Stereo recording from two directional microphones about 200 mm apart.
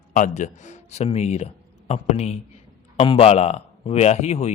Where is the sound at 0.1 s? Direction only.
40° left (ahead or behind).